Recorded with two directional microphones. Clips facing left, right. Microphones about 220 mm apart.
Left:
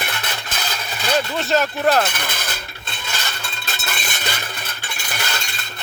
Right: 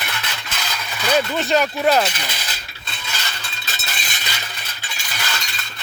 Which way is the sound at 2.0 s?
50° left (ahead or behind).